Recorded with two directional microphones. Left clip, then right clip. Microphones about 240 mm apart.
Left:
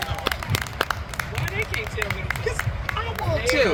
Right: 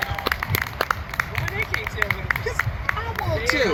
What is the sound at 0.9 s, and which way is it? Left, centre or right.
Run, left.